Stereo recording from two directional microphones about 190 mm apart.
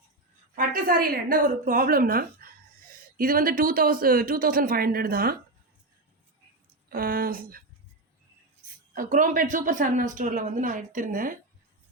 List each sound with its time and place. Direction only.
0.5 s a woman's voice: 50° right (ahead or behind)
6.8 s speech: 50° right (ahead or behind)
9.0 s speech: 45° right (ahead or behind)